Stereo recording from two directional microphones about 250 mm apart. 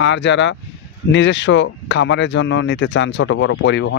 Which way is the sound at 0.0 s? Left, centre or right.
Left.